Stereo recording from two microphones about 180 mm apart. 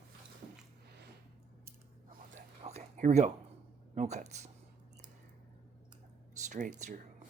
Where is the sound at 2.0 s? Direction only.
40° right (ahead or behind).